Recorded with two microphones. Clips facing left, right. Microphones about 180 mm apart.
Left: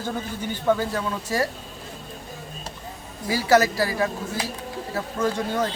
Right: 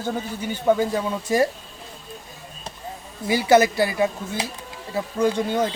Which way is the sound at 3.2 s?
20° right (ahead or behind).